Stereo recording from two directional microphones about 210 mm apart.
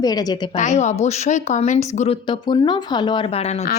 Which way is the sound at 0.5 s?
35° left (ahead or behind).